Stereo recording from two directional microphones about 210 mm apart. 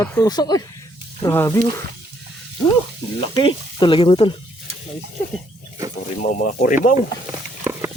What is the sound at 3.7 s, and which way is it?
Speech, 25° left (ahead or behind).